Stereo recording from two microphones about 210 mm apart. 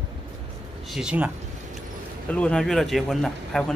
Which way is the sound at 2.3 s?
5° left (ahead or behind).